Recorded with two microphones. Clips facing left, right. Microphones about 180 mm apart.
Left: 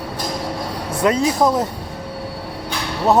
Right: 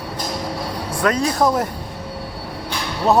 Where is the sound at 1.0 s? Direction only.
20° left (ahead or behind).